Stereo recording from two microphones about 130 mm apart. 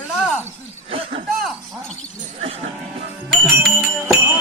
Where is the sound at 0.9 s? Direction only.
45° right (ahead or behind).